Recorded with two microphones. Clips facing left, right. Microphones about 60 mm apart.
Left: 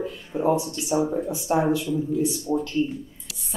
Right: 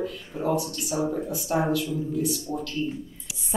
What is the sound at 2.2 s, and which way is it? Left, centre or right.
Speech, centre.